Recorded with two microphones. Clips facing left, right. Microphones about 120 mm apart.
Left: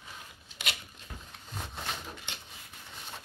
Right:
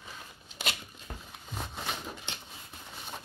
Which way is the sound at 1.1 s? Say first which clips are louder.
Right 3 dB; 40° right (ahead or behind).